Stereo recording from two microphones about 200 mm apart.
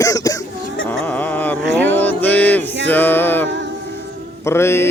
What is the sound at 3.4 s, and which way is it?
Music, 65° right (ahead or behind).